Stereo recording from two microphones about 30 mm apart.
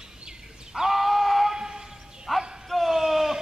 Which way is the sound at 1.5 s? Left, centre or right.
Centre.